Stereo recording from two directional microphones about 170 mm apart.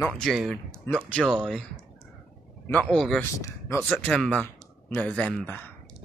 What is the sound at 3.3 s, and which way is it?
Speech, 20° left (ahead or behind).